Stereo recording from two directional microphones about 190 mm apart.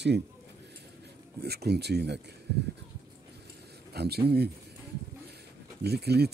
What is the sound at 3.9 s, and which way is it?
Speech, 60° right (ahead or behind).